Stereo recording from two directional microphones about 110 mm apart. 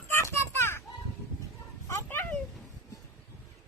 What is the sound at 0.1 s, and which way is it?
Children playing, 25° left (ahead or behind).